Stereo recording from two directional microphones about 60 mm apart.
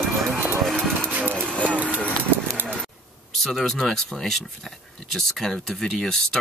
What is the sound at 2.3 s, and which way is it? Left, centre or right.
Pigeon, right.